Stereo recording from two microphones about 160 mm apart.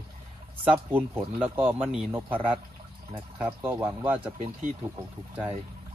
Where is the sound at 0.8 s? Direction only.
10° right (ahead or behind).